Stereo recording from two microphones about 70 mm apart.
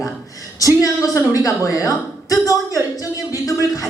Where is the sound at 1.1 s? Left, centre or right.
Left.